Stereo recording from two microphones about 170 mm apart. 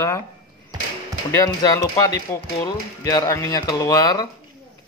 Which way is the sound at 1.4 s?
20° left (ahead or behind).